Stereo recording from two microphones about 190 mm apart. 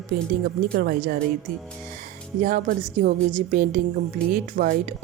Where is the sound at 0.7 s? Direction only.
55° right (ahead or behind).